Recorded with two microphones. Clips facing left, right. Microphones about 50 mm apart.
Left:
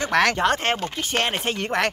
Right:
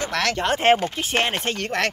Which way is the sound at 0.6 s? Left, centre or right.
Centre.